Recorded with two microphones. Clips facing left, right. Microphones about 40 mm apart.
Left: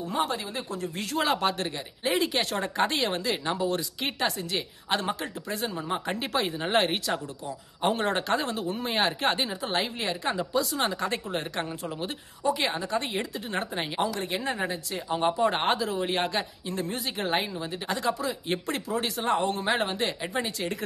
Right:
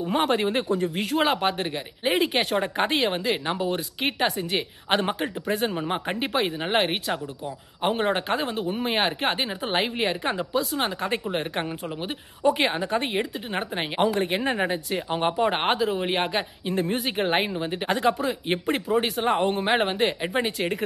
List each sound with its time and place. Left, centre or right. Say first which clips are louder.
0.1 s speech: right 7 dB; right
0.7 s speech: right 5 dB; right
1.3 s speech: right 2 dB; right
2.1 s speech: right 3 dB; right
2.5 s speech: right 3 dB; right
6.6 s speech: right 1 dB; centre
12.4 s speech: right 5 dB; right
13.9 s speech: right 7 dB; right